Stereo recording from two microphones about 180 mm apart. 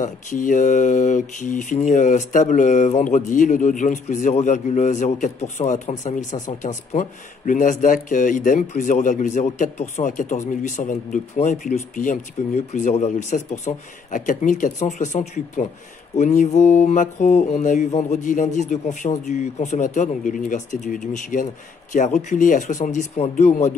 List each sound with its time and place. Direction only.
0.0 s speech: 45° left (ahead or behind)